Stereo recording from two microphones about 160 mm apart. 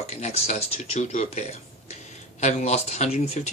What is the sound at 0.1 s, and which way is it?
Speech, 45° left (ahead or behind).